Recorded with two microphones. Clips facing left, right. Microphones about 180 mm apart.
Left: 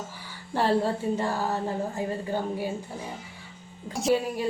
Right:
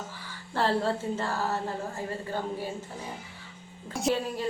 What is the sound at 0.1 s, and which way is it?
Music, 15° left (ahead or behind).